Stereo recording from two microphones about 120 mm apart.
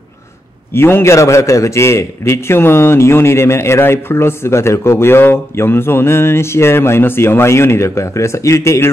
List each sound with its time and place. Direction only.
0.7 s a man's voice: 20° left (ahead or behind)